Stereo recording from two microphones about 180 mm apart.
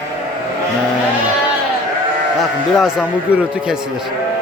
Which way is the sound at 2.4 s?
Centre (ahead or behind).